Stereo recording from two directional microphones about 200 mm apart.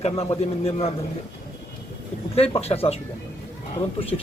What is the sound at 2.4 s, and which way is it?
Speech, 30° left (ahead or behind).